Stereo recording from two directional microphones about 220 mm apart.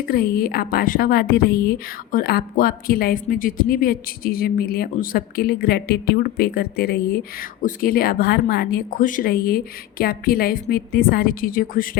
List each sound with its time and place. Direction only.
0.0 s a woman's voice: 45° left (ahead or behind)